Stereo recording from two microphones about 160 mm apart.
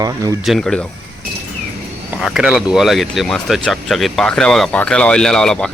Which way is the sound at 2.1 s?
5° right (ahead or behind).